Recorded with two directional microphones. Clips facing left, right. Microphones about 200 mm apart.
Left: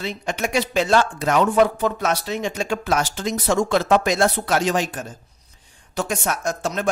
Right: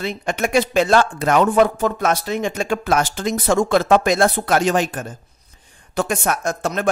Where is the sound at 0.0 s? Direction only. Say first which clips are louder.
Right 3 dB; 55° right (ahead or behind).